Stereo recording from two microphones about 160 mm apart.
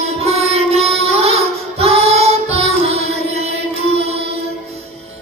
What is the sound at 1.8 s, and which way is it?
Music, 40° right (ahead or behind).